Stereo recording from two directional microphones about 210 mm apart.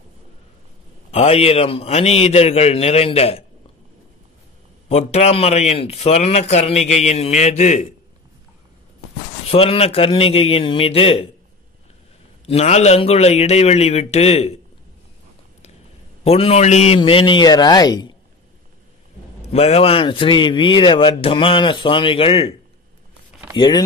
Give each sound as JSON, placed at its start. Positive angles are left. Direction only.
{"t": 1.1, "sound": "speech", "side_deg": 30}
{"t": 4.8, "sound": "a man's voice", "side_deg": 30}
{"t": 9.5, "sound": "speech", "side_deg": 30}
{"t": 12.4, "sound": "a man's voice", "side_deg": 30}
{"t": 16.3, "sound": "speech", "side_deg": 30}
{"t": 19.5, "sound": "speech", "side_deg": 30}